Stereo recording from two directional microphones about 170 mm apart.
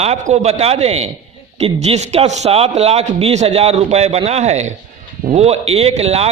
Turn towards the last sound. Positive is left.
turn(degrees=-35)  # may be behind; listen again after turning